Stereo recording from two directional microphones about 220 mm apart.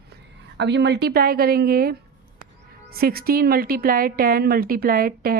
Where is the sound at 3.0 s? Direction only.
45° right (ahead or behind).